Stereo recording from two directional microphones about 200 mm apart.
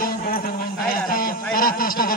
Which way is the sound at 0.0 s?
45° left (ahead or behind).